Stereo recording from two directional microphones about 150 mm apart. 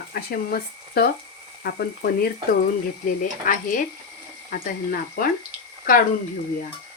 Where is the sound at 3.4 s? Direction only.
60° left (ahead or behind).